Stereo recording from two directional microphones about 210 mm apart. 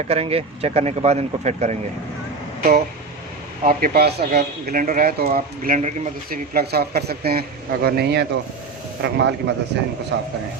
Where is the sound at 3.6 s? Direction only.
45° right (ahead or behind).